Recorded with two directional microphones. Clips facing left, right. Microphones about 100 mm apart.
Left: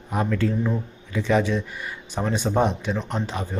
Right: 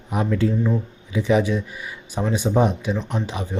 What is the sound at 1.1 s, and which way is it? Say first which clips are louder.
Speech: right 2 dB; 10° right (ahead or behind).